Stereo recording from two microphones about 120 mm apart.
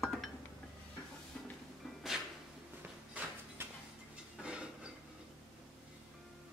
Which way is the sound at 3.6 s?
20° right (ahead or behind).